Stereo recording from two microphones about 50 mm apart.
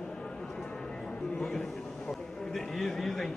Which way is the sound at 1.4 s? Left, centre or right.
Centre.